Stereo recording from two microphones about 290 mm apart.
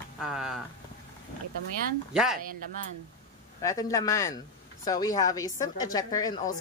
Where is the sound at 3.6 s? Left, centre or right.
Centre.